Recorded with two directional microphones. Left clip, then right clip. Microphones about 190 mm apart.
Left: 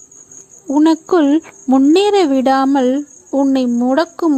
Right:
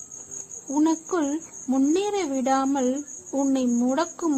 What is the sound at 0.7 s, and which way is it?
Speech, 40° left (ahead or behind).